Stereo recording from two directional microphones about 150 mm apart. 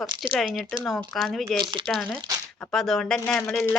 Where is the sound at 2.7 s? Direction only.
Centre (ahead or behind).